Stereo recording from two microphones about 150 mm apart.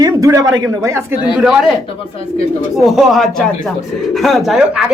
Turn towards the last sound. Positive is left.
turn(degrees=-5)  # may be behind; listen again after turning